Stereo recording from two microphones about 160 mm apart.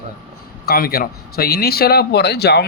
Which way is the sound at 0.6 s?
70° left (ahead or behind).